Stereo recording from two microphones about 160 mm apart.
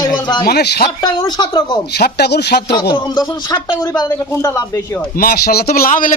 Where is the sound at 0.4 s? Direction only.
90° left.